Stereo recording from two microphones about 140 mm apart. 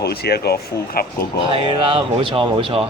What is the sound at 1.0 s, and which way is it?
Speech, 90° left.